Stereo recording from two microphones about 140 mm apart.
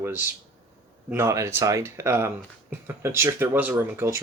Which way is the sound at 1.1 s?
20° right (ahead or behind).